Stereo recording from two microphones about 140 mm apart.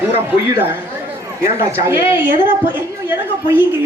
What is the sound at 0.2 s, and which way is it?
A woman's voice, 15° right (ahead or behind).